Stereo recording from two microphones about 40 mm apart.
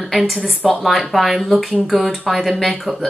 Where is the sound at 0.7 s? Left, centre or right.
Centre.